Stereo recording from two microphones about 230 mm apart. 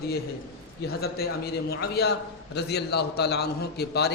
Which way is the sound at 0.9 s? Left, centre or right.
Left.